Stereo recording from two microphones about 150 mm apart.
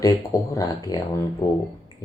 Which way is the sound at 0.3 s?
20° left (ahead or behind).